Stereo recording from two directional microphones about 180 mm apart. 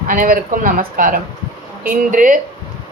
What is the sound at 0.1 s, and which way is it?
A woman's voice, 50° right (ahead or behind).